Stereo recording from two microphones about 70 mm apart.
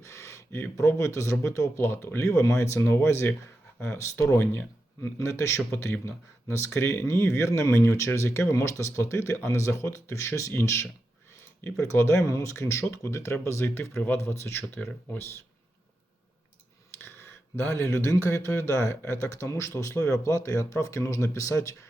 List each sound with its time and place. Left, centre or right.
0.0 s a sound: left
0.8 s a man's voice: left
2.8 s a man's voice: left
5.7 s speech: left
6.7 s a man's voice: left
17.6 s a man's voice: left